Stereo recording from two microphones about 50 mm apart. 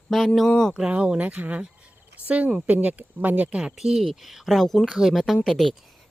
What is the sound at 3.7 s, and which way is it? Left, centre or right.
Speech, centre.